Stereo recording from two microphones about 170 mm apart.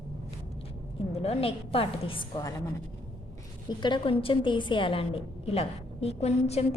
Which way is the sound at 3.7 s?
25° left (ahead or behind).